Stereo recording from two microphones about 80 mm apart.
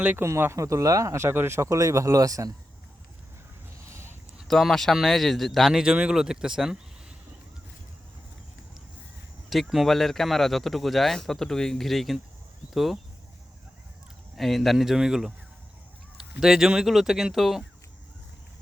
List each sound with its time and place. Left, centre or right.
0.2 s speech: right
3.8 s a sound: right
4.4 s speech: centre
9.5 s speech: centre
14.3 s speech: centre
16.4 s speech: centre